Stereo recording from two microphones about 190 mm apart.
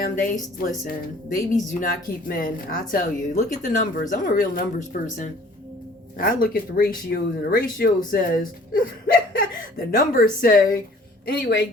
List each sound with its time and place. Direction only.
0.0 s speech: 45° left (ahead or behind)
9.3 s a sound: 45° left (ahead or behind)
10.4 s speech: 45° left (ahead or behind)
11.3 s a woman's voice: 60° left (ahead or behind)